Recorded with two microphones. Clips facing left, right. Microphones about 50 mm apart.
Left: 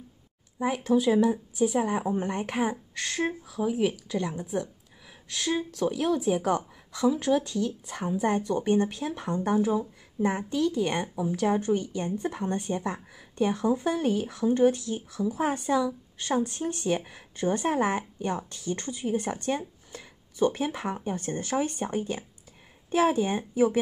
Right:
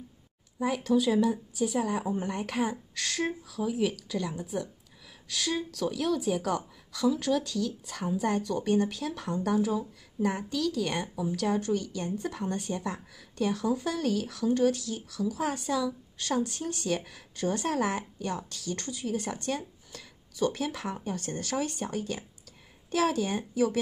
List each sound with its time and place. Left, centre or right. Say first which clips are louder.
0.7 s a woman's voice: left 2 dB; left